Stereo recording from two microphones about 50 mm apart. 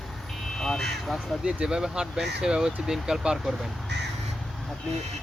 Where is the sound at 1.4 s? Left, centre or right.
Centre.